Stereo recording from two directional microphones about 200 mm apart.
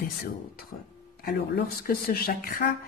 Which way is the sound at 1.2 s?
50° left (ahead or behind).